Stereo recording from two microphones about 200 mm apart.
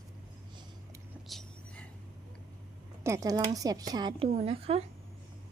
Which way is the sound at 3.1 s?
15° right (ahead or behind).